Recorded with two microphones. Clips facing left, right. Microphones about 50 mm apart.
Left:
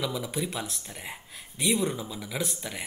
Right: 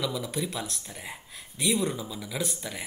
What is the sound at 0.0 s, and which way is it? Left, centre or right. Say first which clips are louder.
A man's voice: even; centre.